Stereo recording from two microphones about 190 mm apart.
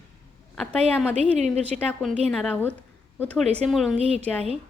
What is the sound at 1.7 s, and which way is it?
A woman's voice, 10° left (ahead or behind).